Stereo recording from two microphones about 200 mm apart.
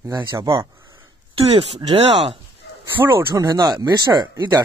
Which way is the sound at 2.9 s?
10° right (ahead or behind).